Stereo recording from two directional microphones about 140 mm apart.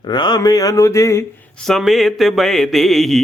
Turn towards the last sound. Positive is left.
turn(degrees=0)  # may be behind; listen again after turning